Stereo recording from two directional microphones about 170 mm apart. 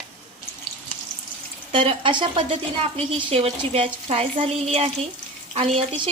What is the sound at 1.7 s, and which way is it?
Speech, 30° right (ahead or behind).